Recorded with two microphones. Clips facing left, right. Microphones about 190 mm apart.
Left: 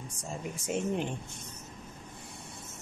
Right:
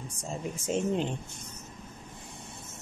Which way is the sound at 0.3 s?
25° right (ahead or behind).